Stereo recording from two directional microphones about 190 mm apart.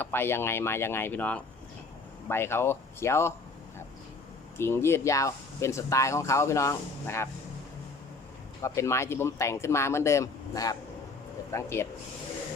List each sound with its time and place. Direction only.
0.0 s speech: 10° left (ahead or behind)
4.5 s speech: 15° left (ahead or behind)
8.6 s speech: 15° left (ahead or behind)